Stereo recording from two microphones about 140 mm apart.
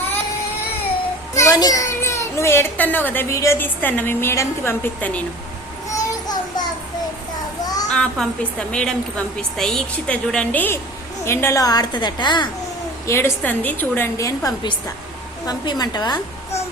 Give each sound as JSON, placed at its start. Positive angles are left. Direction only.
{"t": 1.3, "sound": "a child's voice", "side_deg": 25}
{"t": 5.9, "sound": "a sound", "side_deg": 25}
{"t": 7.6, "sound": "children playing", "side_deg": 25}
{"t": 7.9, "sound": "a woman's voice", "side_deg": 5}
{"t": 13.1, "sound": "a woman's voice", "side_deg": 20}